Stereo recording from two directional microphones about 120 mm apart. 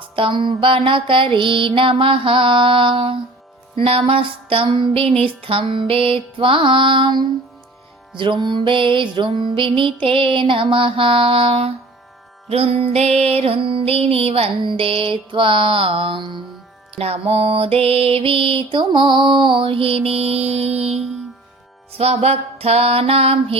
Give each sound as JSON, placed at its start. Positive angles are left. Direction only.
{"t": 0.0, "sound": "mantra", "side_deg": -45}
{"t": 16.9, "sound": "mantra", "side_deg": -55}
{"t": 21.9, "sound": "music", "side_deg": -60}